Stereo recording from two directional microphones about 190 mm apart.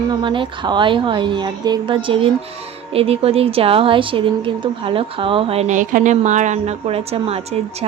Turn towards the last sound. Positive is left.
turn(degrees=-30)  # may be behind; listen again after turning